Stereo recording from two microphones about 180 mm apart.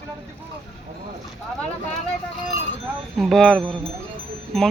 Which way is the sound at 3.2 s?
Centre (ahead or behind).